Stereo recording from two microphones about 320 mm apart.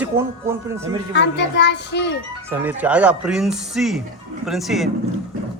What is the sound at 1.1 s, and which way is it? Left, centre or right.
A child's voice, left.